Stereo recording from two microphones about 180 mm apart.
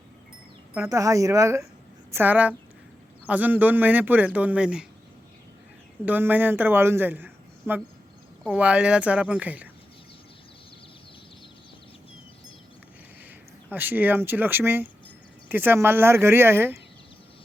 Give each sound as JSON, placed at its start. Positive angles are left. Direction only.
{"t": 0.7, "sound": "speech", "side_deg": -15}
{"t": 6.1, "sound": "speech", "side_deg": -10}
{"t": 13.7, "sound": "speech", "side_deg": -10}